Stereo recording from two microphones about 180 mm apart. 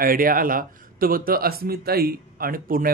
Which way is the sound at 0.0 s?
55° right (ahead or behind).